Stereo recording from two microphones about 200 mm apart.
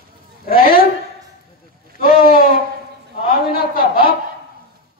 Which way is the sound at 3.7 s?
45° left (ahead or behind).